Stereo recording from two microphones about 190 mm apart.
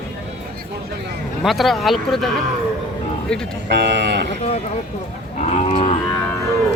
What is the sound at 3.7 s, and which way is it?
Speech, 65° right (ahead or behind).